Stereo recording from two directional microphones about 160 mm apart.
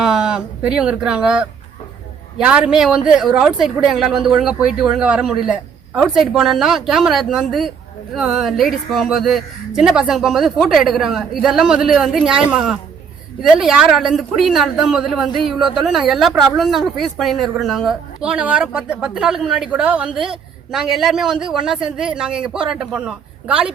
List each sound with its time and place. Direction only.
0.0 s speech: 5° right (ahead or behind)